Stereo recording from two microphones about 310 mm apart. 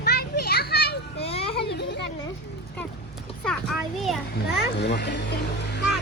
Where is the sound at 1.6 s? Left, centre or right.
Left.